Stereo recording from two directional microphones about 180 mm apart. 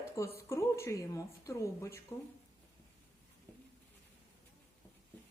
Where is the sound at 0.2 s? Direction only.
15° left (ahead or behind).